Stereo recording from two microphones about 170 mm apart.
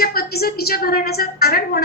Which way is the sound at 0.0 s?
65° left (ahead or behind).